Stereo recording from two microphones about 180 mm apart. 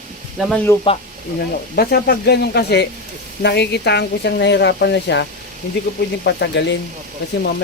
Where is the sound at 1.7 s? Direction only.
60° left (ahead or behind).